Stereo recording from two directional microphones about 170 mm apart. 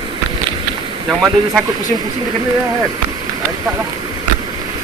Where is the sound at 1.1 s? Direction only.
10° right (ahead or behind).